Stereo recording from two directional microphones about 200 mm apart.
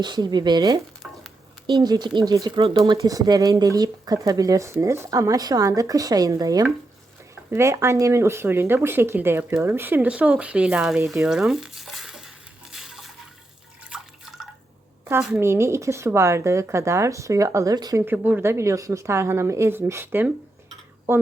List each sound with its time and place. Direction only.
0.0 s speech: 20° right (ahead or behind); by 12.3 s centre (ahead or behind)
12.7 s water: centre (ahead or behind)
13.9 s drip: centre (ahead or behind)
15.0 s a woman's voice: 5° right (ahead or behind)